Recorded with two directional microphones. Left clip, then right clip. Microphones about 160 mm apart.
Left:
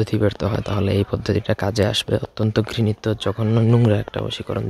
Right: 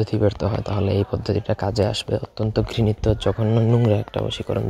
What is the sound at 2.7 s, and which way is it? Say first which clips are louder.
Speech: right 1 dB; 5° left (ahead or behind).